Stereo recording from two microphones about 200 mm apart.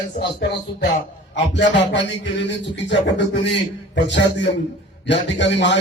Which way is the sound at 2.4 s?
60° left (ahead or behind).